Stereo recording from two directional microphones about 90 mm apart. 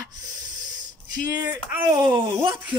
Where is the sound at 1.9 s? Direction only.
50° right (ahead or behind).